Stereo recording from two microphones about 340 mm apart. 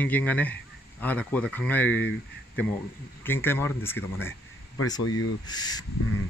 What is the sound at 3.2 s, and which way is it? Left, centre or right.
Speech, centre.